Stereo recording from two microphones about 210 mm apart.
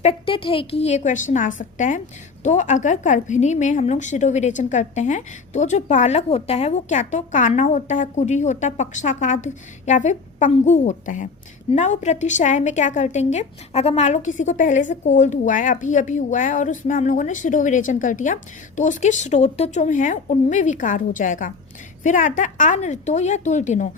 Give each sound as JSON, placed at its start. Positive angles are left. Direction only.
{"t": 0.0, "sound": "a woman's voice", "side_deg": 30}